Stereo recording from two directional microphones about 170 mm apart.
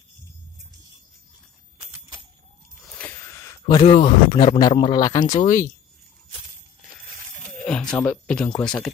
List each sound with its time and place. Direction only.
3.0 s a sound: 15° left (ahead or behind)
3.8 s speech: 40° left (ahead or behind)
4.6 s a man's voice: 25° left (ahead or behind)
7.6 s speech: 5° left (ahead or behind)